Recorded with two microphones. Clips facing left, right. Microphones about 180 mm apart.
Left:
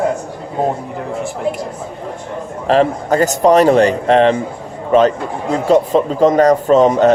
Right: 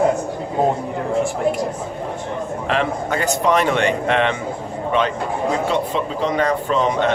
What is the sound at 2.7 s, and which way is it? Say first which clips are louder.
Speech: left 9 dB; 40° left (ahead or behind).